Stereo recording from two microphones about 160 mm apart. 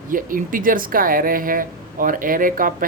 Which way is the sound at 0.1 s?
60° right (ahead or behind).